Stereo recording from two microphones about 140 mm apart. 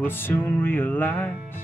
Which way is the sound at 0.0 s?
15° left (ahead or behind).